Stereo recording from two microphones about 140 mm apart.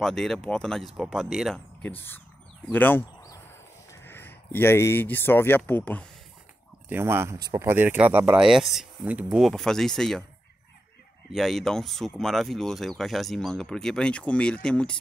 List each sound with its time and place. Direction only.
0.0 s speech: 5° left (ahead or behind)
1.8 s speech: 15° left (ahead or behind)
6.9 s speech: 15° right (ahead or behind)
8.4 s speech: 5° right (ahead or behind)
11.3 s speech: 5° left (ahead or behind)